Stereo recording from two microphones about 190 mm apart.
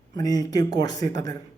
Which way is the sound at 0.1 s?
20° left (ahead or behind).